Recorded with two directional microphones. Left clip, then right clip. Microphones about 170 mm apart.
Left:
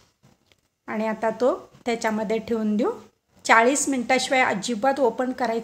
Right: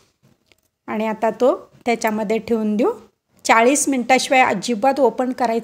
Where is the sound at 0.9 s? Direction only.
35° right (ahead or behind).